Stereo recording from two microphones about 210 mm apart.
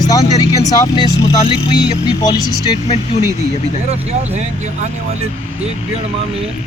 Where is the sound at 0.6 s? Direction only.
20° left (ahead or behind).